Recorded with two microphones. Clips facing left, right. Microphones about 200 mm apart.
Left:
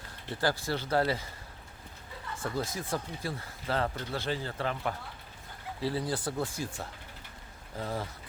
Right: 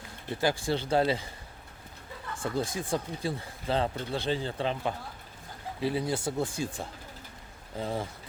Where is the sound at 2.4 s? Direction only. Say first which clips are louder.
Right 3 dB; 25° right (ahead or behind).